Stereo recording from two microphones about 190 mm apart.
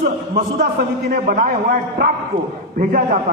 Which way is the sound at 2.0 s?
60° right (ahead or behind).